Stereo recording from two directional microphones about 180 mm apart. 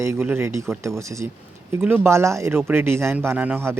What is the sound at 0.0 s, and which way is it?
Speech, 15° right (ahead or behind).